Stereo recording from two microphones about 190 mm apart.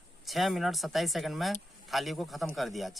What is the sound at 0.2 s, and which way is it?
Speech, centre (ahead or behind).